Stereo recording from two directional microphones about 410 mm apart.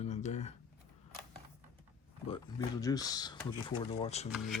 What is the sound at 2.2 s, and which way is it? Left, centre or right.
Speech, centre.